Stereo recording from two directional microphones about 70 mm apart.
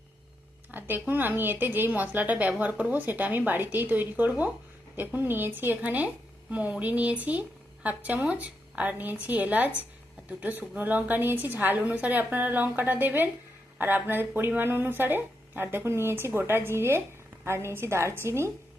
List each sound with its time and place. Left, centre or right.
0.7 s a woman's voice: right